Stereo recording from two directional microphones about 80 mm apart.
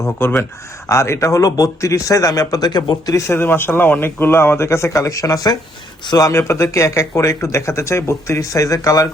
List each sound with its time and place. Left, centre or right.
0.2 s speech: left
0.9 s speech: left
3.2 s speech: left